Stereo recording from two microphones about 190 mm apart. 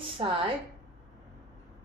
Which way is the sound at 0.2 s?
30° right (ahead or behind).